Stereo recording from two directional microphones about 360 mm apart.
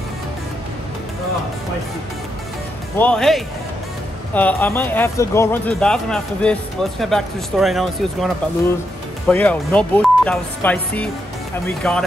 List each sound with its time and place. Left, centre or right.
3.0 s speech: centre
9.3 s speech: centre